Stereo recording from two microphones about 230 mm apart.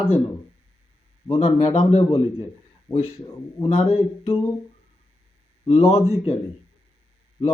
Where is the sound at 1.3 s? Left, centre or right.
Left.